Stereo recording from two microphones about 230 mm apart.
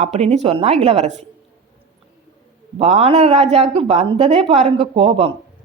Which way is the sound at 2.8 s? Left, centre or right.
Right.